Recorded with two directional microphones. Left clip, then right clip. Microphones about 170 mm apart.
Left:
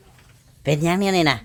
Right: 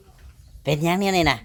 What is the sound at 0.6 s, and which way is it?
Speech, 5° left (ahead or behind).